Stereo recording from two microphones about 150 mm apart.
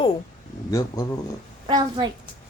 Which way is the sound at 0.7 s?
20° left (ahead or behind).